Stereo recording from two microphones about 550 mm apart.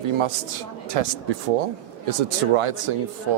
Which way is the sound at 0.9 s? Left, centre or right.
Right.